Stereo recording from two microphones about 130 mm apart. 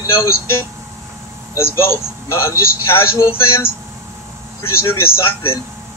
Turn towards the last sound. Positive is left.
turn(degrees=20)  # may be behind; listen again after turning